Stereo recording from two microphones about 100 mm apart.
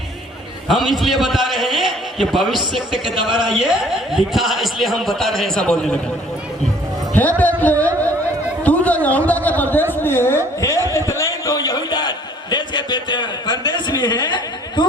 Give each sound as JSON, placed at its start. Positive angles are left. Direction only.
{"t": 0.7, "sound": "a man's voice", "side_deg": 0}
{"t": 7.2, "sound": "a man's voice", "side_deg": 15}
{"t": 8.6, "sound": "a sound", "side_deg": 15}
{"t": 9.9, "sound": "speech", "side_deg": 20}